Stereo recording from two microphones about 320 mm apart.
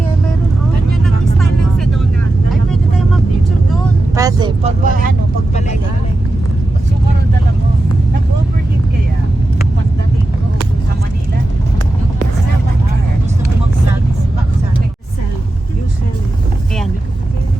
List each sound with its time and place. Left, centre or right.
1.0 s vehicle: centre
4.1 s vehicle: centre
4.8 s vehicle: right